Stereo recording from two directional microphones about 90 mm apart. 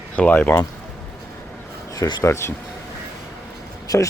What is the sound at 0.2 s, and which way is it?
Speech, 20° left (ahead or behind).